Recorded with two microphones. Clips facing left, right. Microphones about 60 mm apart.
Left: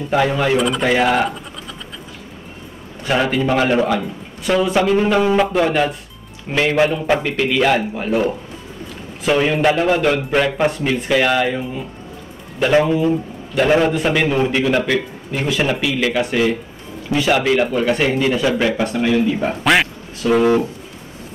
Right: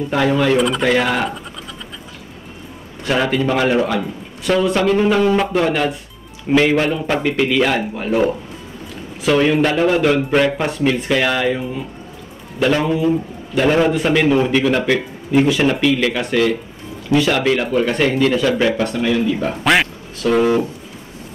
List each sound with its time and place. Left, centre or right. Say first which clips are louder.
0.1 s a man's voice: even; centre
3.0 s a man's voice: even; centre
9.3 s a man's voice: right 1 dB; centre
12.8 s a man's voice: even; centre
19.6 s speech: even; centre